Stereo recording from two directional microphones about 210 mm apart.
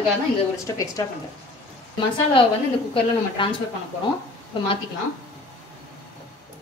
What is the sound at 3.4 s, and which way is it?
Speech, 25° left (ahead or behind).